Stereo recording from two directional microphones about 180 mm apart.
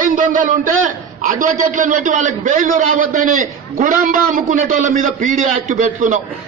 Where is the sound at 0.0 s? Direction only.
45° right (ahead or behind).